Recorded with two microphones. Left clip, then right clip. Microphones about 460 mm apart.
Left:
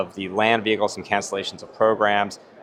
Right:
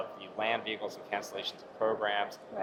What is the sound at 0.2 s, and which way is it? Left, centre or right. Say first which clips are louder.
Speech: left 13 dB; left.